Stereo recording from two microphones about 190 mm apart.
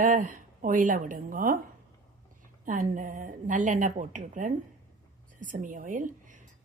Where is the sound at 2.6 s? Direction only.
45° right (ahead or behind).